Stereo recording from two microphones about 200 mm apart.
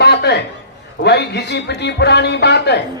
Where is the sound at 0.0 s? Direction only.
55° left (ahead or behind).